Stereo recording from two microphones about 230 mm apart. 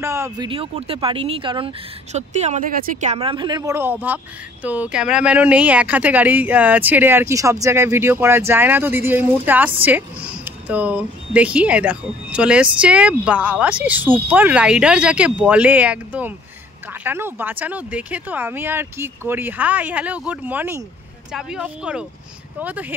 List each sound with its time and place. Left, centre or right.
0.0 s speech: centre